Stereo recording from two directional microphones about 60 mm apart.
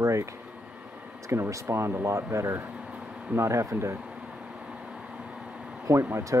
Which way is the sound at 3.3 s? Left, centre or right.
Right.